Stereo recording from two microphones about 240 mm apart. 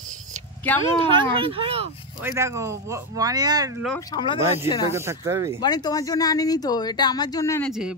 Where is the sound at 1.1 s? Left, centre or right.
Right.